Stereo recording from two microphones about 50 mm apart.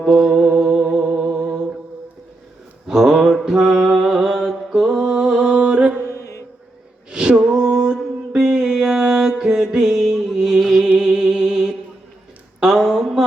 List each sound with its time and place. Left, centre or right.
0.1 s music: centre
0.3 s music: centre
2.8 s a sound: centre
3.4 s mantra: centre
4.0 s music: centre
6.1 s music: left
7.1 s mantra: centre
10.6 s music: centre
10.8 s music: centre
12.5 s a sound: centre